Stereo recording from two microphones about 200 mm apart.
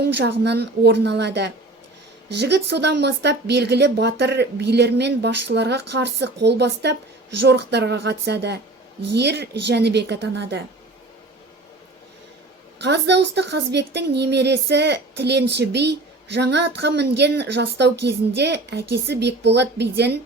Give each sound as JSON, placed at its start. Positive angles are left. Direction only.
{"t": 0.0, "sound": "a woman's voice", "side_deg": -55}
{"t": 12.8, "sound": "a woman's voice", "side_deg": -60}